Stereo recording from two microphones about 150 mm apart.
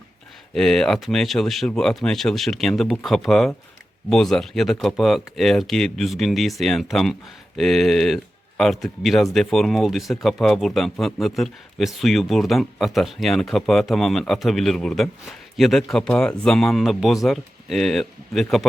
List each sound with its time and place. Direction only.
0.5 s speech: 5° left (ahead or behind)